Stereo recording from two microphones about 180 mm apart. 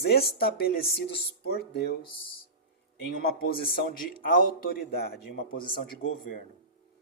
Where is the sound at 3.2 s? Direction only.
55° left (ahead or behind).